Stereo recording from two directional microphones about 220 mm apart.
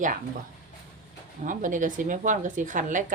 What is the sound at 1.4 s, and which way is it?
Speech, 35° right (ahead or behind).